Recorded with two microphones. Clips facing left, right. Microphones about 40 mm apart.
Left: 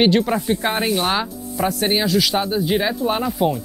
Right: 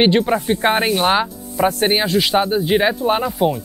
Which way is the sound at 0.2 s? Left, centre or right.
Centre.